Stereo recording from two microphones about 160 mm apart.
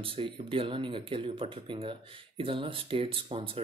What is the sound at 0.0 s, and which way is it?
Speech, 35° right (ahead or behind).